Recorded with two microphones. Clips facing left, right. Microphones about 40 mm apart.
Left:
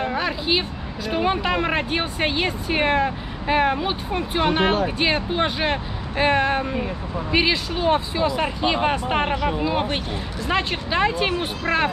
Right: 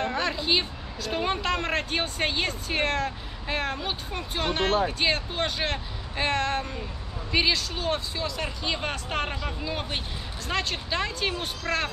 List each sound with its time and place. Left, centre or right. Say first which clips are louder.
0.0 s speech: left 3 dB; centre
9.3 s speech: left 11 dB; left
9.6 s speech: left 9 dB; left